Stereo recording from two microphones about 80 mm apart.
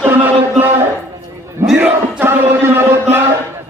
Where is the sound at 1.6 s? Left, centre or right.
Centre.